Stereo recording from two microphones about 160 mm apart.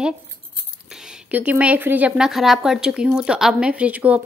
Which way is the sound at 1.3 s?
10° right (ahead or behind).